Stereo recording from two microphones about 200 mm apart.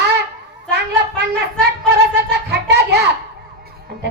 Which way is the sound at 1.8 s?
55° right (ahead or behind).